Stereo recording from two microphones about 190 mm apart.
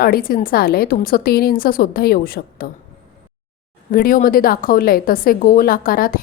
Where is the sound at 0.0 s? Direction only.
50° left (ahead or behind).